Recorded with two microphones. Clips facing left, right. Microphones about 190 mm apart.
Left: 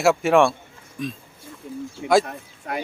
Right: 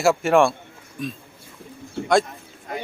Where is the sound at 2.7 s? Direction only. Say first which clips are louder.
Left 3 dB; 70° left (ahead or behind).